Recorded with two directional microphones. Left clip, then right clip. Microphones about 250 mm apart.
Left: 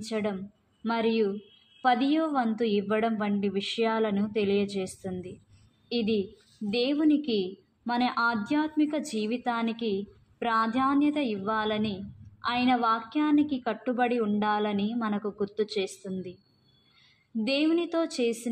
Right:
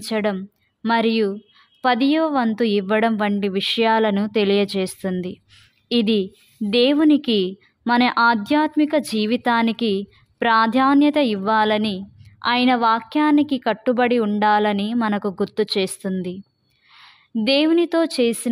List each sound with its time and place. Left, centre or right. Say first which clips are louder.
0.0 s a woman's voice: right 9 dB; right